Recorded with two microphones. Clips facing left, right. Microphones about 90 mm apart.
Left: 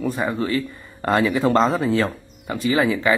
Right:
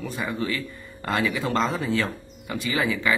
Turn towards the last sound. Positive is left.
turn(degrees=30)  # may be behind; listen again after turning